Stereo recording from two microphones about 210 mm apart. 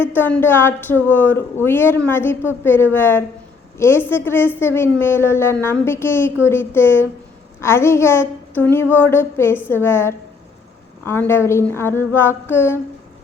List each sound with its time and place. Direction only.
0.0 s a woman's voice: 10° left (ahead or behind)